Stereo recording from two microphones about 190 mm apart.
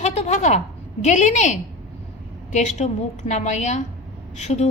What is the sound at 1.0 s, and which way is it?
A woman's voice, 40° left (ahead or behind).